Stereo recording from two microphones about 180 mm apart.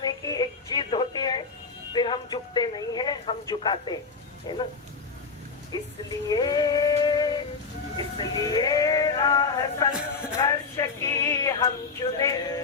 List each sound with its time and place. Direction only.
0.0 s music: 20° left (ahead or behind)
1.9 s a sound: 25° left (ahead or behind)
4.5 s bow-wow: 25° left (ahead or behind)
5.7 s bow-wow: 20° left (ahead or behind)
6.2 s synthetic singing: 20° left (ahead or behind)
7.9 s male singing: 20° left (ahead or behind)
10.3 s a sound: 15° left (ahead or behind)